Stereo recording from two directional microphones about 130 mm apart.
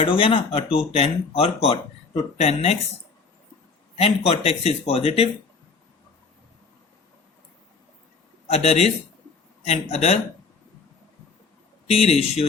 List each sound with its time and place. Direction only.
0.0 s speech: 45° left (ahead or behind)
3.9 s speech: 50° left (ahead or behind)
8.4 s speech: 50° left (ahead or behind)
11.9 s speech: 50° left (ahead or behind)